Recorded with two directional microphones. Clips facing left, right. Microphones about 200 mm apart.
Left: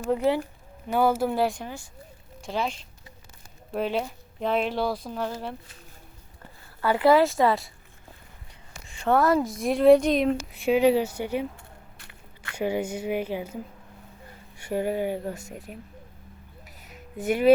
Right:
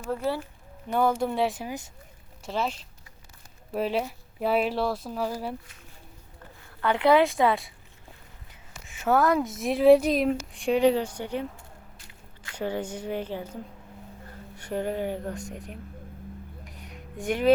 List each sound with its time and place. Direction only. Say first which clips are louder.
0.1 s speech: left 5 dB; 15° left (ahead or behind)
0.9 s speech: left 2 dB; 5° left (ahead or behind)
6.8 s speech: left 1 dB; 5° left (ahead or behind)
8.9 s speech: left 1 dB; 5° right (ahead or behind)
11.9 s biting: left 1 dB; 60° left (ahead or behind)
12.5 s speech: left 3 dB; 10° left (ahead or behind)
16.6 s music: right 3 dB; 5° left (ahead or behind)